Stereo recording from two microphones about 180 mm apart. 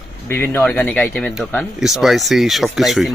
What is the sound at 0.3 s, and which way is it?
Speech, 10° left (ahead or behind).